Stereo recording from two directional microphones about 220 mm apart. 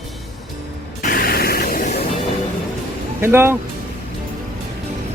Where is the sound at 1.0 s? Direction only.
40° left (ahead or behind).